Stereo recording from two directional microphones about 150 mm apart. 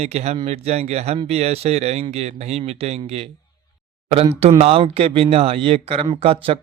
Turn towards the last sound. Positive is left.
turn(degrees=-40)  # may be behind; listen again after turning